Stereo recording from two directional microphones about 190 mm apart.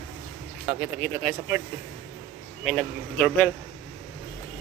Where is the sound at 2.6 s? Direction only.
Centre (ahead or behind).